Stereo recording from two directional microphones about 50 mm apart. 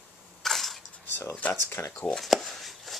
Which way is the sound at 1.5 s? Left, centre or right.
Left.